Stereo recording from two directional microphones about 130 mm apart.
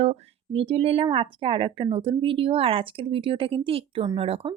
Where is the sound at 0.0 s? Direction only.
60° right (ahead or behind).